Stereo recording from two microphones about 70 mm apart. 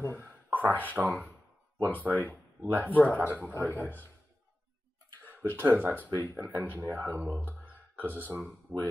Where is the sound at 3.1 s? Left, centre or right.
Right.